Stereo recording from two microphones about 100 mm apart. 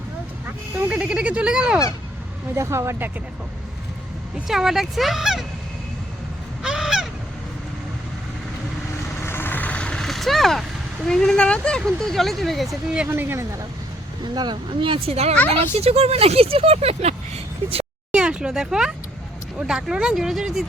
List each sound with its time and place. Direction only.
0.4 s speech: 15° right (ahead or behind)
2.6 s speech: 30° right (ahead or behind)
4.4 s speech: 5° right (ahead or behind)
6.6 s honk: 5° right (ahead or behind)
9.2 s speech: 20° left (ahead or behind); by 13.1 s 5° right (ahead or behind)
13.1 s speech: 25° right (ahead or behind)
14.3 s speech: 50° right (ahead or behind); by 17.8 s 85° right
18.1 s speech: 10° right (ahead or behind)